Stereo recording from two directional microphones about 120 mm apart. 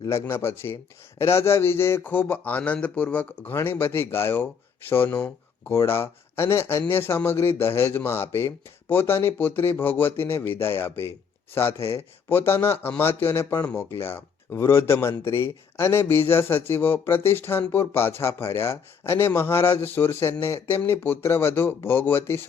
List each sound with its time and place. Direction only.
0.0 s speech: 20° left (ahead or behind)